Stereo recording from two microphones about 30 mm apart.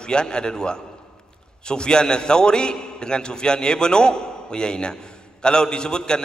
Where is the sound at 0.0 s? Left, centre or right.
Left.